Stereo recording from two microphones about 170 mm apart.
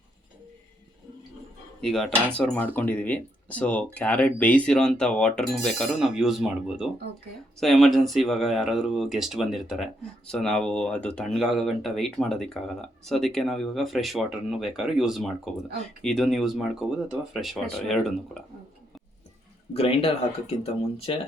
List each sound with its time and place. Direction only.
1.8 s speech: centre (ahead or behind)
19.7 s speech: 35° left (ahead or behind)